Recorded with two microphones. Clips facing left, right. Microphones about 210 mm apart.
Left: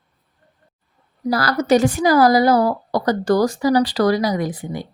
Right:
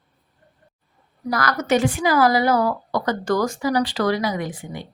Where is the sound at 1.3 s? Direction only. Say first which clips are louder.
Left 4 dB; 30° left (ahead or behind).